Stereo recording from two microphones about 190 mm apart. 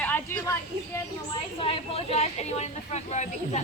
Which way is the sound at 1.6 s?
30° left (ahead or behind).